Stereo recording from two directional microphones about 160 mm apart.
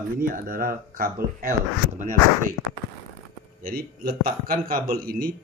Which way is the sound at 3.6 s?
65° right (ahead or behind).